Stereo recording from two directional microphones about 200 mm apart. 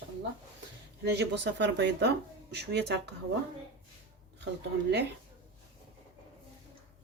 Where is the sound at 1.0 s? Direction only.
60° right (ahead or behind).